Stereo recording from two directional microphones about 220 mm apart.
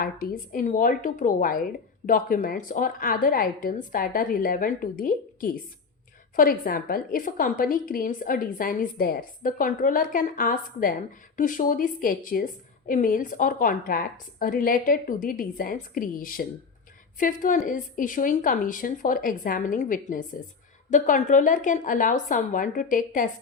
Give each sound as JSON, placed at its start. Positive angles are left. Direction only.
{"t": 0.0, "sound": "a woman's voice", "side_deg": 40}